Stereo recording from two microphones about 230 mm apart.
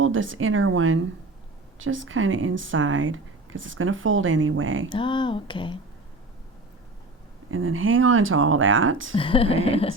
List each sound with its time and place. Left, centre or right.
0.0 s speech: right
4.9 s speech: left
7.5 s speech: right
9.1 s speech: left